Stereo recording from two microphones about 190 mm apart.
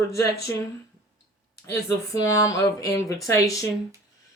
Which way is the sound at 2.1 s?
15° left (ahead or behind).